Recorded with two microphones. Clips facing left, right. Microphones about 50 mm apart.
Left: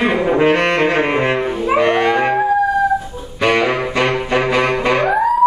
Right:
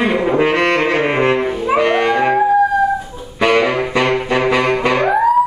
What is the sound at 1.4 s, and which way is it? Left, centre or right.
Brass instrument, centre.